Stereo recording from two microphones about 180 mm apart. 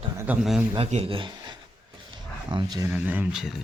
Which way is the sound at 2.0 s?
25° right (ahead or behind).